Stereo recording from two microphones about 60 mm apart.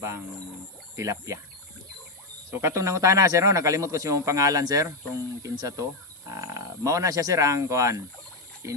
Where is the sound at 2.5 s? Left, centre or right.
Right.